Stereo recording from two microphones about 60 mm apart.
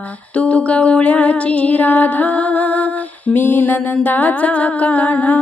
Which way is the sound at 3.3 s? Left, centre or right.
Left.